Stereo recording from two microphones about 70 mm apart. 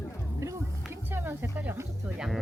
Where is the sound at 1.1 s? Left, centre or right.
Right.